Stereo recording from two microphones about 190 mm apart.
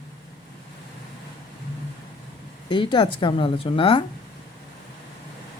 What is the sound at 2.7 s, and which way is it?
A woman's voice, 25° left (ahead or behind).